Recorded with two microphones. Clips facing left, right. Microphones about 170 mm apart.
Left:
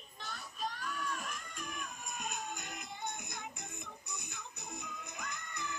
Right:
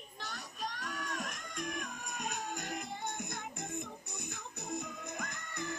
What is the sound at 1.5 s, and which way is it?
Music, 65° right (ahead or behind).